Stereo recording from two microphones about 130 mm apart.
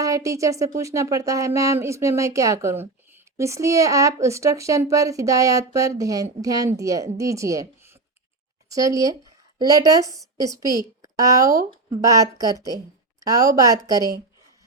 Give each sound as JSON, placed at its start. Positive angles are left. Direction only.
{"t": 0.0, "sound": "speech", "side_deg": -25}